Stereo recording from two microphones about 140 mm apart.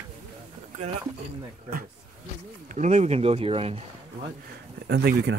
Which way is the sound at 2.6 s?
60° right (ahead or behind).